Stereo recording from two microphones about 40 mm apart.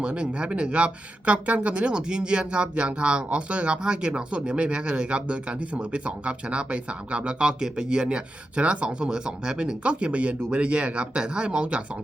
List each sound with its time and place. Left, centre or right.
0.0 s speech: right
9.0 s speech: centre
9.8 s speech: right